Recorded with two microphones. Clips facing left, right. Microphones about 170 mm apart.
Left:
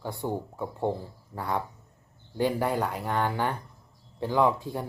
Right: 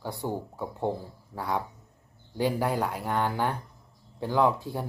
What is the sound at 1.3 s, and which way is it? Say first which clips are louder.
Speech: even; 5° right (ahead or behind).